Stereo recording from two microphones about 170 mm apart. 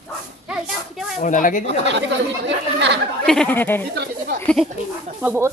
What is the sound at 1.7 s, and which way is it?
Speech, 90° right.